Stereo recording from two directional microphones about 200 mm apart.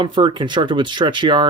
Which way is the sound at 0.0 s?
25° right (ahead or behind).